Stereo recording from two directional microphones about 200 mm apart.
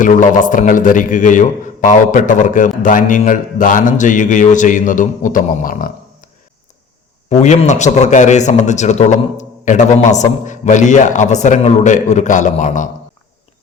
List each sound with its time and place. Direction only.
0.0 s a man's voice: 40° left (ahead or behind)
7.3 s a man's voice: 35° left (ahead or behind)